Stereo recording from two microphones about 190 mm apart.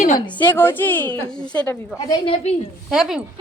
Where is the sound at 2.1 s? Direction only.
30° left (ahead or behind).